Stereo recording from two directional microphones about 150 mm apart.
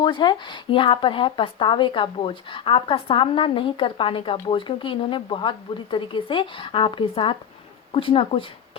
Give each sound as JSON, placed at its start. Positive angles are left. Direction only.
{"t": 0.0, "sound": "speech", "side_deg": 30}